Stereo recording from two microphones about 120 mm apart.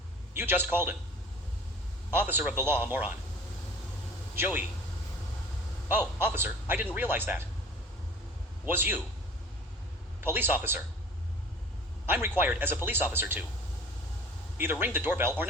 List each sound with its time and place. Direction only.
0.3 s speech: 15° right (ahead or behind)
2.1 s speech: 15° right (ahead or behind)
4.4 s speech: 15° right (ahead or behind)
5.9 s speech: 15° right (ahead or behind)
8.6 s speech: 15° right (ahead or behind)
10.2 s a man's voice: 20° right (ahead or behind)
12.0 s a man's voice: 15° right (ahead or behind)
14.6 s speech: 15° right (ahead or behind)